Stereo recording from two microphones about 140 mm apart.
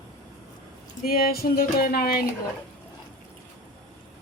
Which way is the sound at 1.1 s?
90° left.